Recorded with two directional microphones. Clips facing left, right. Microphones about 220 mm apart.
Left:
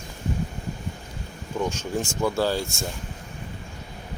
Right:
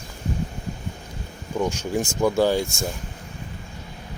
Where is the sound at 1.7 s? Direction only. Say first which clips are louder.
Right 3 dB; 10° right (ahead or behind).